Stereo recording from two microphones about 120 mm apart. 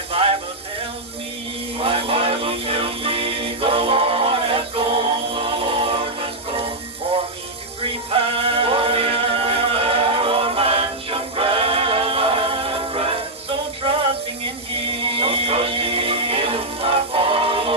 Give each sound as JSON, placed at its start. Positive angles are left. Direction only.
{"t": 0.1, "sound": "music", "side_deg": -50}
{"t": 1.8, "sound": "music", "side_deg": -50}
{"t": 8.1, "sound": "music", "side_deg": -50}
{"t": 15.0, "sound": "music", "side_deg": -50}